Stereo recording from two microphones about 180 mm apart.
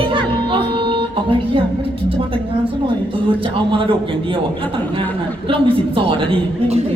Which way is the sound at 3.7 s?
30° right (ahead or behind).